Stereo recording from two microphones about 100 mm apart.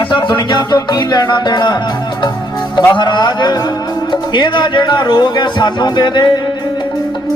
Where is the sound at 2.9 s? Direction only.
50° left (ahead or behind).